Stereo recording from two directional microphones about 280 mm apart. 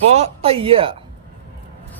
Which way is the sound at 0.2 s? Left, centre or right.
Centre.